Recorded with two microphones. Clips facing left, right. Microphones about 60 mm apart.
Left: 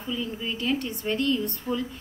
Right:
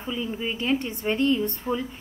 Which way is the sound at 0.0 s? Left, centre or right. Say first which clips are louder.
Right 2 dB; right.